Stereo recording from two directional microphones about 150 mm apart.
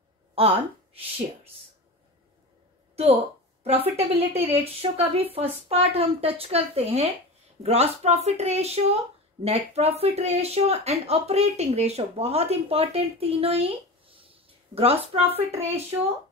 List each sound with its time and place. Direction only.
0.3 s a woman's voice: 40° right (ahead or behind)
3.6 s a woman's voice: 40° right (ahead or behind)